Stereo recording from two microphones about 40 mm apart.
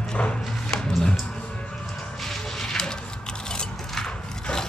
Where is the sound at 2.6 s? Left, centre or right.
Centre.